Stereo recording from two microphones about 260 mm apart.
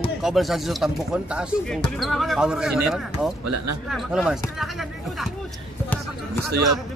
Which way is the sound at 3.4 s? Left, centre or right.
Right.